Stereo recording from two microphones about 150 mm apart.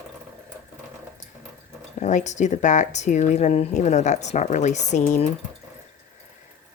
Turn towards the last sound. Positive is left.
turn(degrees=50)  # may be behind; listen again after turning